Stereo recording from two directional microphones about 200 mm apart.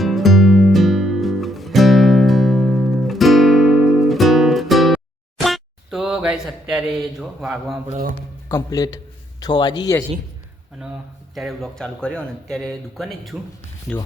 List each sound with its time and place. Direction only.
0.0 s music: centre (ahead or behind)
5.4 s a sound: centre (ahead or behind)
8.4 s a man's voice: 15° left (ahead or behind)
11.3 s a man's voice: centre (ahead or behind)